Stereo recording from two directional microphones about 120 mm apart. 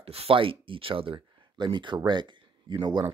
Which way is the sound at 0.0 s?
55° right (ahead or behind).